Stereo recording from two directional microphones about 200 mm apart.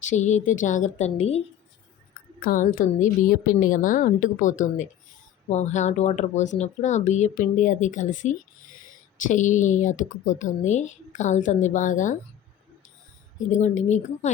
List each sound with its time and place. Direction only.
0.0 s a woman's voice: 35° left (ahead or behind)
2.4 s a woman's voice: 45° left (ahead or behind)
13.5 s a woman's voice: 35° left (ahead or behind)